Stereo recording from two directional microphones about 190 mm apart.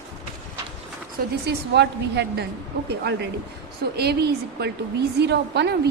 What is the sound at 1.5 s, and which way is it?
A woman's voice, 60° right (ahead or behind).